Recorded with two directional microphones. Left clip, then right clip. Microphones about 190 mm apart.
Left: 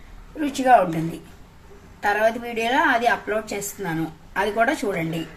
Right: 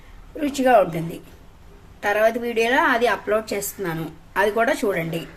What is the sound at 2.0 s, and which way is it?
A woman's voice, 25° right (ahead or behind).